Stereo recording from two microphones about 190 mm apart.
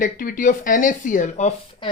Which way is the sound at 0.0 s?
45° left (ahead or behind).